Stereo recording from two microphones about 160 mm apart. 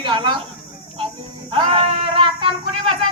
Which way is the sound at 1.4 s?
30° right (ahead or behind).